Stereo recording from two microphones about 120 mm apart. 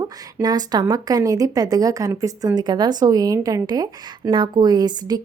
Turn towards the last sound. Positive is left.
turn(degrees=-35)  # may be behind; listen again after turning